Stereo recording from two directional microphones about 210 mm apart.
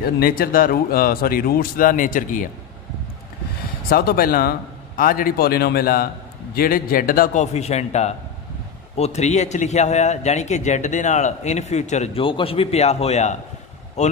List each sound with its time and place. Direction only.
0.0 s speech: 45° left (ahead or behind)
3.9 s a man's voice: 45° left (ahead or behind)